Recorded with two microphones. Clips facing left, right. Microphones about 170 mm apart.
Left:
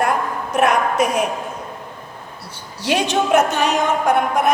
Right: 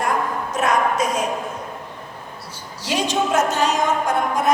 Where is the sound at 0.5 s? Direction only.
65° left (ahead or behind).